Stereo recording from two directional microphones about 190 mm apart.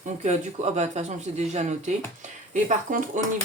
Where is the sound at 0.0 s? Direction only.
35° right (ahead or behind).